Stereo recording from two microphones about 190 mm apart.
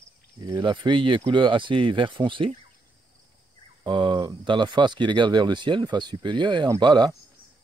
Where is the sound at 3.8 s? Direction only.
25° right (ahead or behind).